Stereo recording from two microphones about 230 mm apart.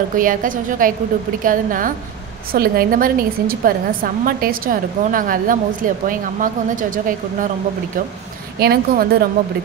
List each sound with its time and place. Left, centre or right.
0.1 s a woman's voice: right
8.5 s a woman's voice: right